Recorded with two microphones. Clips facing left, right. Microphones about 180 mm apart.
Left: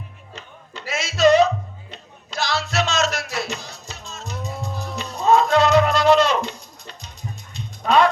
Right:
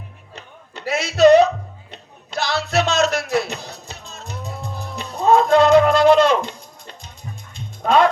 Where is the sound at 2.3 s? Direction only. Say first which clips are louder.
Right 3 dB; 60° right (ahead or behind).